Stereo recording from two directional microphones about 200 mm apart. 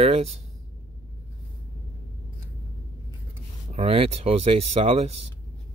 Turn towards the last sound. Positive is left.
turn(degrees=-30)  # may be behind; listen again after turning